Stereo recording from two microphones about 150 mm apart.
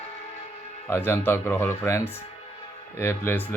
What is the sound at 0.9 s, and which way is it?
A man's voice, 15° left (ahead or behind).